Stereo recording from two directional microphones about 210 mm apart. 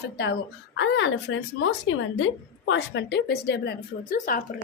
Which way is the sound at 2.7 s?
55° left (ahead or behind).